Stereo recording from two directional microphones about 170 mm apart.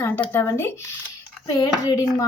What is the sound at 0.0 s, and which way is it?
Speech, 10° left (ahead or behind).